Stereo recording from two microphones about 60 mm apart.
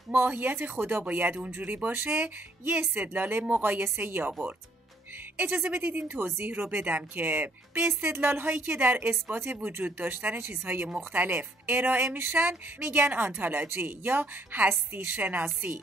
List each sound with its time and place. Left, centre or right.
0.1 s a woman's voice: right
4.3 s speech: right
5.4 s speech: right
6.1 s a woman's voice: right